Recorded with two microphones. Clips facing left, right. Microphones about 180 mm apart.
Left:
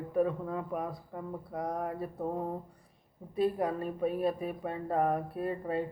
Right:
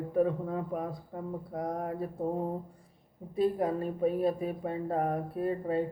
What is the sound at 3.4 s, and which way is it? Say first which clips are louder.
Speech: right 2 dB; 25° right (ahead or behind).